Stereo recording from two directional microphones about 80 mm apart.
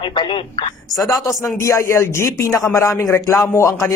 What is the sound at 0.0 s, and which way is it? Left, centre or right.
Speech, left.